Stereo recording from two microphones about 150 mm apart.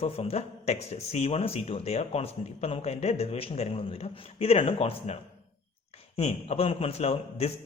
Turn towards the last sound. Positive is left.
turn(degrees=45)  # may be behind; listen again after turning